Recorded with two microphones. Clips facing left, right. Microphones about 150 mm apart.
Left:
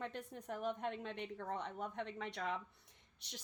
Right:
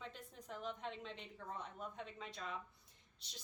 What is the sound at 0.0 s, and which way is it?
A woman's voice, 65° left (ahead or behind).